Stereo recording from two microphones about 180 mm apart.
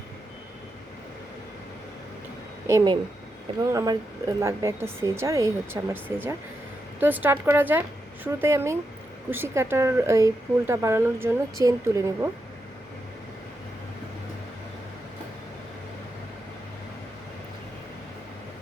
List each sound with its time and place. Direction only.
2.6 s speech: 20° right (ahead or behind)